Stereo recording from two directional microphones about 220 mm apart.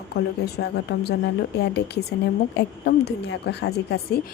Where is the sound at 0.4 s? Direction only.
50° left (ahead or behind).